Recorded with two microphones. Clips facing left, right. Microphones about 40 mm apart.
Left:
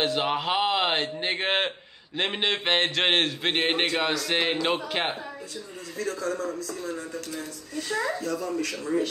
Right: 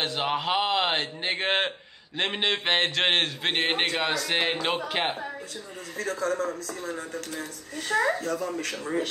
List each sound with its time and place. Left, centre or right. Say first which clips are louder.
0.0 s a man's voice: left 2 dB; centre
5.9 s speech: right 2 dB; right